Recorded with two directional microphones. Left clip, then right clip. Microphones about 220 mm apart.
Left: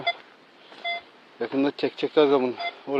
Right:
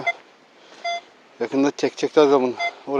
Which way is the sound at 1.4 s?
25° right (ahead or behind).